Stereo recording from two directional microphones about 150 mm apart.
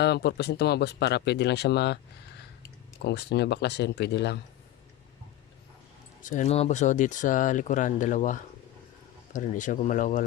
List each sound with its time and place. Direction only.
0.0 s speech: 90° left
3.0 s speech: 90° left
6.2 s speech: 50° left (ahead or behind)